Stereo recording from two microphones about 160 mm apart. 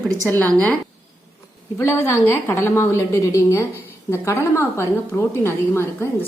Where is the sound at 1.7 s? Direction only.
15° left (ahead or behind).